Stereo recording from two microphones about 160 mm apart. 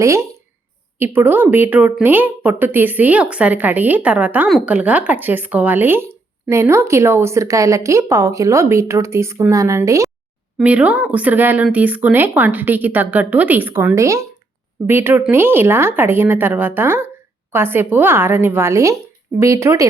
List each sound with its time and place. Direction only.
0.0 s a woman's voice: 20° right (ahead or behind)
4.4 s speech: centre (ahead or behind)
4.7 s a woman's voice: 10° right (ahead or behind)
10.6 s a woman's voice: 10° right (ahead or behind)